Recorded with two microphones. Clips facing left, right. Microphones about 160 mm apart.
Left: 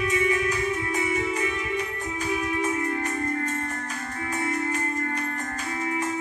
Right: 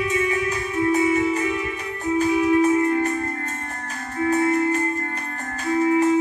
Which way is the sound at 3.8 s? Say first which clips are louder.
Right 8 dB; 35° right (ahead or behind).